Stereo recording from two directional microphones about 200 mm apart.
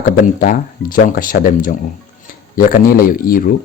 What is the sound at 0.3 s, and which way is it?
A man's voice, 45° left (ahead or behind).